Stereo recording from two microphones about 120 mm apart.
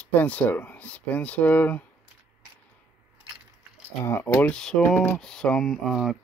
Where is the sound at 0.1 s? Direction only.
15° left (ahead or behind).